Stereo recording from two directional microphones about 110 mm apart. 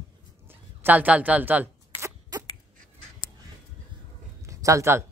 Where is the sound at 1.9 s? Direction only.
50° left (ahead or behind).